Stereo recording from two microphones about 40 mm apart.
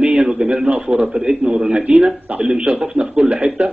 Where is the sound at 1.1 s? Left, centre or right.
Right.